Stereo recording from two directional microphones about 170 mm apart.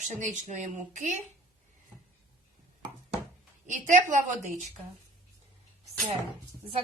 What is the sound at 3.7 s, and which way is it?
Speech, 45° right (ahead or behind).